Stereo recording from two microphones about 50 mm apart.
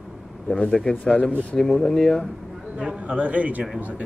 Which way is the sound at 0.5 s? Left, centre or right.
Centre.